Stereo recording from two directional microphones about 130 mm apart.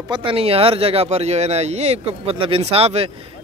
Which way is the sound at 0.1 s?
40° right (ahead or behind).